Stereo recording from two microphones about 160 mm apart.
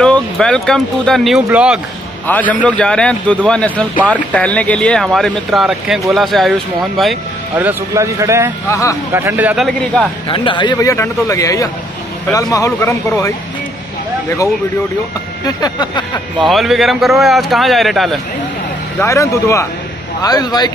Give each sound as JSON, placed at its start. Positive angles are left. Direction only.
{"t": 0.0, "sound": "speech", "side_deg": 5}
{"t": 2.2, "sound": "a man's voice", "side_deg": 10}
{"t": 7.5, "sound": "speech", "side_deg": -15}
{"t": 8.6, "sound": "speech", "side_deg": 20}
{"t": 9.1, "sound": "speech", "side_deg": -15}
{"t": 10.2, "sound": "speech", "side_deg": 30}
{"t": 15.4, "sound": "a sound", "side_deg": 25}
{"t": 16.4, "sound": "speech", "side_deg": 0}
{"t": 18.9, "sound": "speech", "side_deg": 20}